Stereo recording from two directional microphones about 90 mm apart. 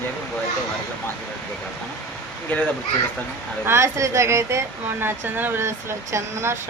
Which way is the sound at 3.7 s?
30° right (ahead or behind).